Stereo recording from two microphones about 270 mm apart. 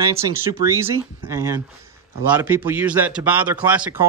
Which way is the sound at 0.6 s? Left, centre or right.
Left.